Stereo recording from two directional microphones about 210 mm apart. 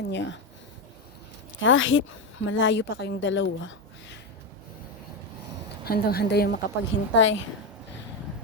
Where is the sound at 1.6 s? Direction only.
65° left (ahead or behind).